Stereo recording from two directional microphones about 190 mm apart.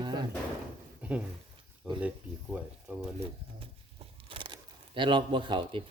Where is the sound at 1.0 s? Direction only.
5° right (ahead or behind).